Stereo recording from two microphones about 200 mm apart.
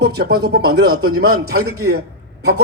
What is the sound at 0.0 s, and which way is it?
A man's voice, 55° right (ahead or behind).